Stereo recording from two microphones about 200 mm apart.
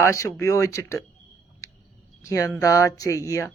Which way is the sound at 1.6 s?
15° left (ahead or behind).